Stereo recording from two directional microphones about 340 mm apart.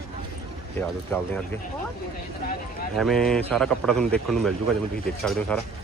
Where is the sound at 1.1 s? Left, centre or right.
Centre.